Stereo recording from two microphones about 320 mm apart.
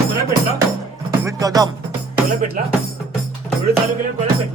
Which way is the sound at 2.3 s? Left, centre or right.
Right.